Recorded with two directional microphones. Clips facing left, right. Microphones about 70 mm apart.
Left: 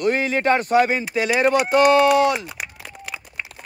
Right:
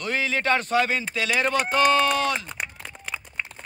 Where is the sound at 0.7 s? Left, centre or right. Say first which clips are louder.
Left 5 dB; centre.